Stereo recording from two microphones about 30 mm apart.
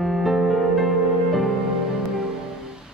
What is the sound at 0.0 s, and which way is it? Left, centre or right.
Music, centre.